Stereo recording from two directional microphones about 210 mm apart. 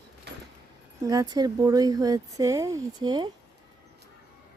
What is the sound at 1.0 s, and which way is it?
Speech, 15° right (ahead or behind).